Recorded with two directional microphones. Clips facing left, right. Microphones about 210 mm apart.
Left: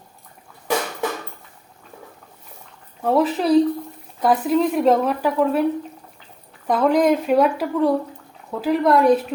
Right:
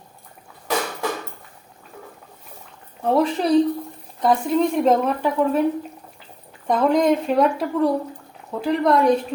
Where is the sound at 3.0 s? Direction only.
Centre (ahead or behind).